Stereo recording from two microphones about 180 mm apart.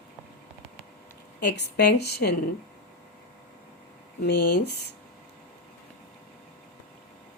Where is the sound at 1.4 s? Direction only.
70° left (ahead or behind).